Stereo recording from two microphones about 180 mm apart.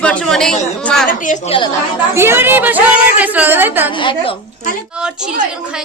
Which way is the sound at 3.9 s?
25° left (ahead or behind).